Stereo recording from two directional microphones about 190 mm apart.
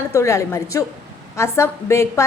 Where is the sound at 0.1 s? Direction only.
15° left (ahead or behind).